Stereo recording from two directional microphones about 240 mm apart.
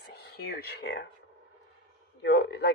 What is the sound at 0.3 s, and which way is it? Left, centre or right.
Speech, left.